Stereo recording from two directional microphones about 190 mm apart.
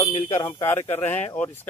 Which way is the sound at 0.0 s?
25° left (ahead or behind).